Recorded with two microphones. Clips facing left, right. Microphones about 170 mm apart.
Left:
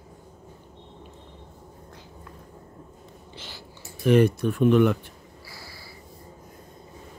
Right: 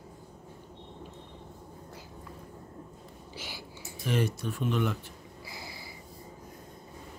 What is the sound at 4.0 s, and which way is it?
Speech, 60° left (ahead or behind).